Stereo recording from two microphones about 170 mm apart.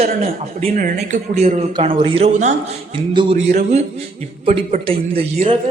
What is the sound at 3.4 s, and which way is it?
A man's voice, 40° right (ahead or behind).